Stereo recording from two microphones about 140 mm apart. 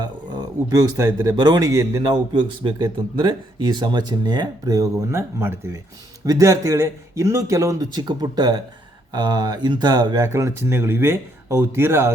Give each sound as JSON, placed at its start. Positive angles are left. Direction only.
{"t": 0.0, "sound": "speech", "side_deg": -30}